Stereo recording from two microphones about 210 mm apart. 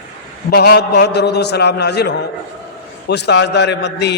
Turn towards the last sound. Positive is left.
turn(degrees=55)  # may be behind; listen again after turning